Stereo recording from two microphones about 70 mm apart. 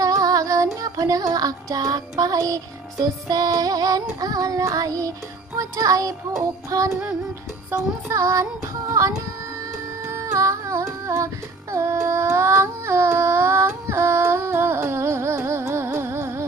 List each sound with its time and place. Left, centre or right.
0.0 s female singing: right
0.7 s music: right
7.7 s music: right
8.1 s child singing: right
10.0 s music: right
11.7 s a sound: right